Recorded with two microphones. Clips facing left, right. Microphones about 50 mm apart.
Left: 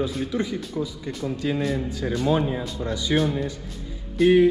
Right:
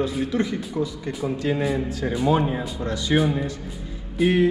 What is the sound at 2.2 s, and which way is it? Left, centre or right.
Speech, right.